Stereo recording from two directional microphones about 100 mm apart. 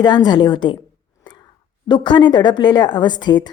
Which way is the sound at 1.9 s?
50° left (ahead or behind).